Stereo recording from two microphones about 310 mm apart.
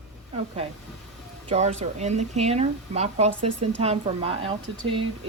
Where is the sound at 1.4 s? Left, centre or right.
Right.